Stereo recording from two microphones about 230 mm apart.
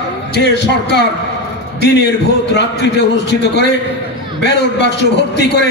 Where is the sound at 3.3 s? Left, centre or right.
Left.